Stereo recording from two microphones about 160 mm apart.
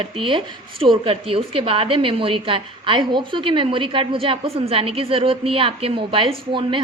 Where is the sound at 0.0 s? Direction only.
35° right (ahead or behind).